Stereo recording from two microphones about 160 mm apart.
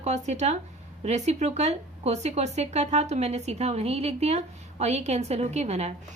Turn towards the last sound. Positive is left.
turn(degrees=-45)  # may be behind; listen again after turning